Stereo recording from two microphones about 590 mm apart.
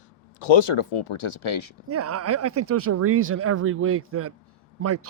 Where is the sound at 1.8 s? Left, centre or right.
Right.